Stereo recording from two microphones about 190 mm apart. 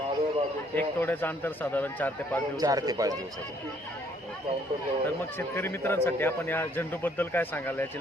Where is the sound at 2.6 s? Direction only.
20° right (ahead or behind).